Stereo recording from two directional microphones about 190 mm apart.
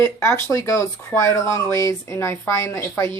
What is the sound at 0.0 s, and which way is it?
Speech, 15° left (ahead or behind).